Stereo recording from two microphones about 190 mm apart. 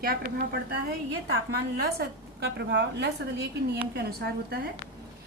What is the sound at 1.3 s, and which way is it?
A woman's voice, 55° right (ahead or behind).